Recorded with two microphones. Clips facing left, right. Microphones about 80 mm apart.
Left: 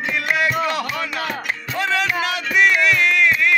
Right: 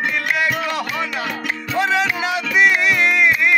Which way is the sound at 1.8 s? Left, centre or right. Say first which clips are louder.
Right 2 dB; centre.